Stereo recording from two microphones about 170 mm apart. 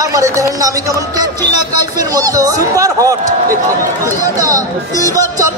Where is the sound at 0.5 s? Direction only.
20° right (ahead or behind).